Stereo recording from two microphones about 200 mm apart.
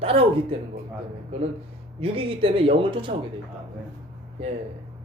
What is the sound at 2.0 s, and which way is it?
Speech, 25° right (ahead or behind).